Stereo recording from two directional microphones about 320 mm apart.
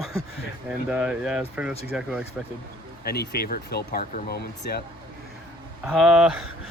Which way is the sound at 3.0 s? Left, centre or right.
Left.